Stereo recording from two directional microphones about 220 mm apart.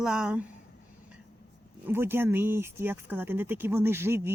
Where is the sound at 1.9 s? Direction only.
10° right (ahead or behind).